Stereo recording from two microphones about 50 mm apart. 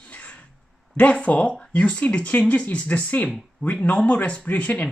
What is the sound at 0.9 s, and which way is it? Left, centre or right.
Speech, left.